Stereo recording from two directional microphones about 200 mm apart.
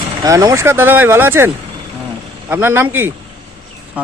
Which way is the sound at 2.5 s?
10° right (ahead or behind).